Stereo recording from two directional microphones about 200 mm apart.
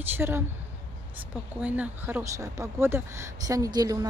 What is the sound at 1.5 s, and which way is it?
Speech, 5° right (ahead or behind).